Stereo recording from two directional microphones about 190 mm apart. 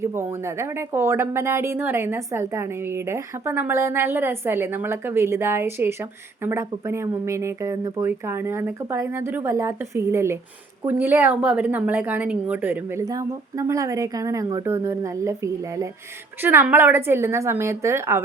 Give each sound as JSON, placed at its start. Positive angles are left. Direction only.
{"t": 0.0, "sound": "speech", "side_deg": -15}